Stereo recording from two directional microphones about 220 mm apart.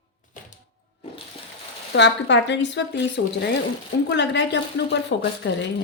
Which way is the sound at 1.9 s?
55° left (ahead or behind).